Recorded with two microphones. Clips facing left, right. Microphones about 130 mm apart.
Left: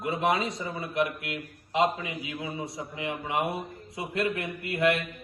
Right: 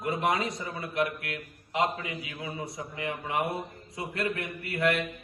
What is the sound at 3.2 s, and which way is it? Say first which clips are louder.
Speech: left 1 dB; 25° left (ahead or behind).